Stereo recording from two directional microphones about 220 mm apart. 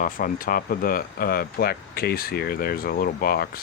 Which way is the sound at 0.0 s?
40° left (ahead or behind).